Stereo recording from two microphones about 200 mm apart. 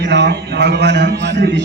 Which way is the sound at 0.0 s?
60° right (ahead or behind).